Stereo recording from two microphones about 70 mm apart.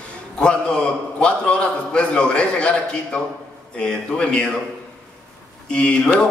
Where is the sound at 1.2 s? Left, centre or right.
Centre.